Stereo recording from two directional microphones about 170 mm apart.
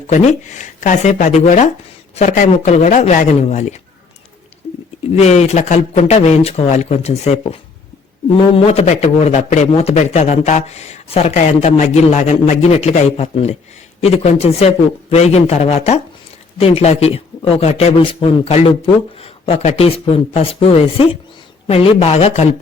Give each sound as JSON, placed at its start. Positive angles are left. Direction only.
{"t": 0.1, "sound": "speech", "side_deg": 45}
{"t": 4.6, "sound": "a sound", "side_deg": 40}
{"t": 5.1, "sound": "speech", "side_deg": 40}